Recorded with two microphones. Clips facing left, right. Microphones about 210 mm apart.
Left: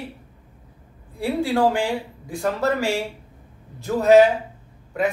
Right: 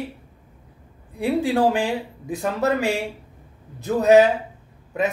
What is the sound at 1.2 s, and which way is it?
Speech, 20° right (ahead or behind).